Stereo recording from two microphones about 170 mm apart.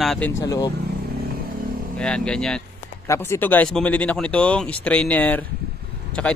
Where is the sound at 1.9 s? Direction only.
5° left (ahead or behind).